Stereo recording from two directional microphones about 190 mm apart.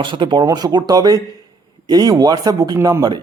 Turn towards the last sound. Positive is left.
turn(degrees=-20)  # may be behind; listen again after turning